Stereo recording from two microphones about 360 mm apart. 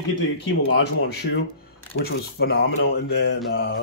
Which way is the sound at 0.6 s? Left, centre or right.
Left.